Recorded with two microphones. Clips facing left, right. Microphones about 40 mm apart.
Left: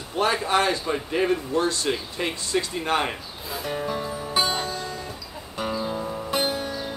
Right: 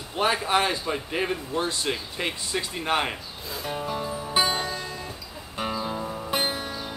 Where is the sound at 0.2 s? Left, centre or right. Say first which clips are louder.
Left 1 dB; centre.